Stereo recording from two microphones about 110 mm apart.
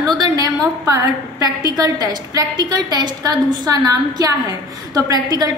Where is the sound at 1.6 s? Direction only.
35° right (ahead or behind).